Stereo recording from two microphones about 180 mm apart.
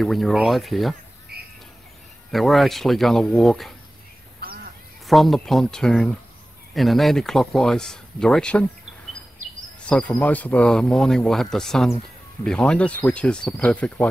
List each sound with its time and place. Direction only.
0.0 s speech: centre (ahead or behind)
1.3 s bird: 60° right (ahead or behind)
2.3 s speech: centre (ahead or behind)
5.0 s speech: centre (ahead or behind)
9.8 s speech: 5° left (ahead or behind)